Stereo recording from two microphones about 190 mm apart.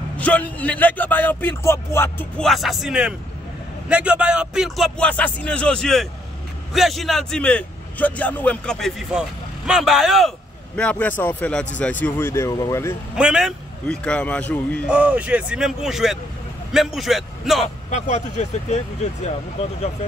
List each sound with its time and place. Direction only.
0.2 s a man's voice: 10° left (ahead or behind)
13.1 s a man's voice: 5° right (ahead or behind)
14.9 s a man's voice: 5° right (ahead or behind)
17.8 s speech: 40° left (ahead or behind)